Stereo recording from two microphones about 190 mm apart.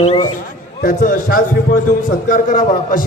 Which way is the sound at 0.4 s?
45° left (ahead or behind).